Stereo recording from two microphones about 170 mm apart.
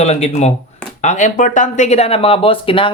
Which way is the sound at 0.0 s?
40° left (ahead or behind).